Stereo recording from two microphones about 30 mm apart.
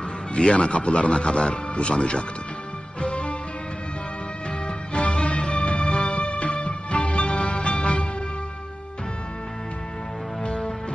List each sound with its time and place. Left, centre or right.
0.3 s a man's voice: left
3.0 s music: left
4.6 s music: left
5.9 s music: left
6.1 s music: left
10.4 s music: left